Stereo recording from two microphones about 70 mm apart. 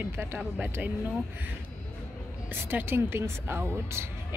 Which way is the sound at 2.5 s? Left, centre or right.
Right.